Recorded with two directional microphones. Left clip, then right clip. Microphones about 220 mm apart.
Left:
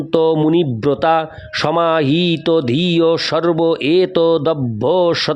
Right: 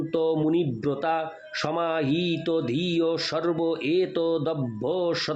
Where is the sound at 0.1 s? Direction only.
45° left (ahead or behind).